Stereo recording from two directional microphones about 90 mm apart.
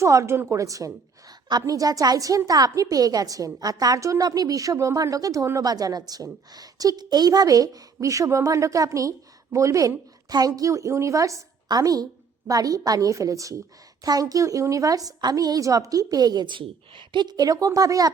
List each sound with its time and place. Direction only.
0.0 s a woman's voice: 35° right (ahead or behind); by 16.6 s 50° right (ahead or behind)
16.6 s a woman's voice: 70° right (ahead or behind); by 18.1 s 40° right (ahead or behind)